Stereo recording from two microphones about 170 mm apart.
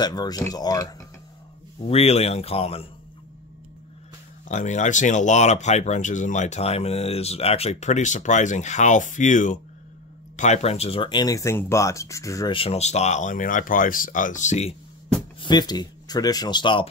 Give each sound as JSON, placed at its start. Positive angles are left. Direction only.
{"t": 0.0, "sound": "speech", "side_deg": 25}
{"t": 1.9, "sound": "speech", "side_deg": 40}
{"t": 4.5, "sound": "speech", "side_deg": 45}
{"t": 12.5, "sound": "speech", "side_deg": 35}
{"t": 15.4, "sound": "speech", "side_deg": 25}